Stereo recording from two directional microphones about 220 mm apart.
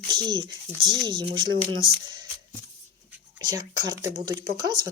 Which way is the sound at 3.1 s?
20° right (ahead or behind).